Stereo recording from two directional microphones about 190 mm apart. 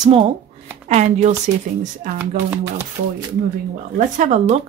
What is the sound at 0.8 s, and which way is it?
Speech, 35° right (ahead or behind).